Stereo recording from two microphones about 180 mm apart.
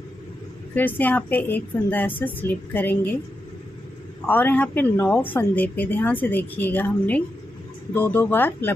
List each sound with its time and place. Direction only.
0.7 s speech: 10° left (ahead or behind)
4.3 s speech: 10° left (ahead or behind)